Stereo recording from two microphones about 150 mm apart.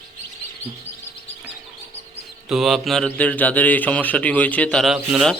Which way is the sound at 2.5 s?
Centre (ahead or behind).